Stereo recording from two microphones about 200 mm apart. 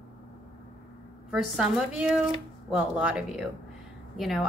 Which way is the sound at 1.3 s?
5° right (ahead or behind).